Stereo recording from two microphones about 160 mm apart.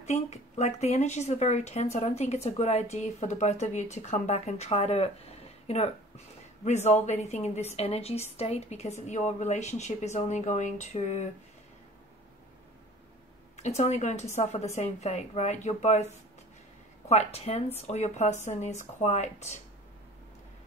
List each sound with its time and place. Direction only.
0.0 s speech: 45° left (ahead or behind)
13.6 s speech: 45° left (ahead or behind)
17.1 s speech: 40° left (ahead or behind)